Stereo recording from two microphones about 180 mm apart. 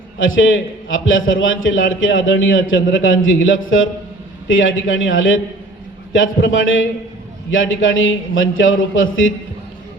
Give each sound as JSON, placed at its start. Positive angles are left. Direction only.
{"t": 0.2, "sound": "a man's voice", "side_deg": 90}